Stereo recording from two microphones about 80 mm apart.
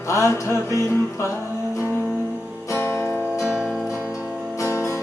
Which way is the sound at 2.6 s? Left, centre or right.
Left.